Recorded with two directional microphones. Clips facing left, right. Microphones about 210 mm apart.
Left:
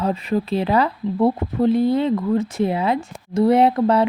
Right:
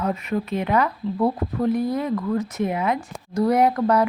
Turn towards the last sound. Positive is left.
turn(degrees=25)  # may be behind; listen again after turning